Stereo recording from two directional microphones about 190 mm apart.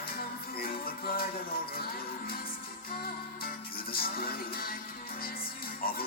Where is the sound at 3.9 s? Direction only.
50° left (ahead or behind).